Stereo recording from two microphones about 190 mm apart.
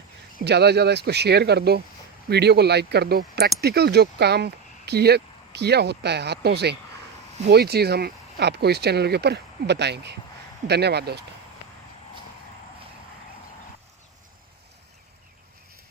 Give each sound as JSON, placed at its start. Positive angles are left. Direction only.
{"t": 0.3, "sound": "speech", "side_deg": -60}